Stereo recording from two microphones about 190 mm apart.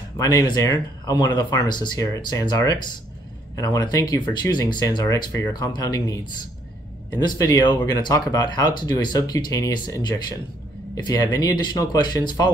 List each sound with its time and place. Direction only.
0.2 s speech: 20° left (ahead or behind)
7.2 s speech: 20° left (ahead or behind)